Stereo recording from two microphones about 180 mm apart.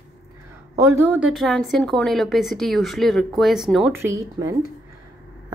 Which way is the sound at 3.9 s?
15° right (ahead or behind).